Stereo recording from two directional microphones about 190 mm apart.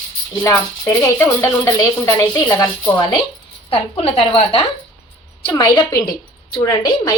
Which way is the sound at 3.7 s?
30° left (ahead or behind).